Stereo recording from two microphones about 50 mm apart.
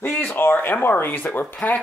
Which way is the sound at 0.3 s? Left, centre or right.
Left.